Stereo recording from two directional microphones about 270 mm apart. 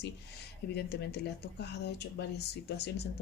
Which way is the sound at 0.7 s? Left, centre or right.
Left.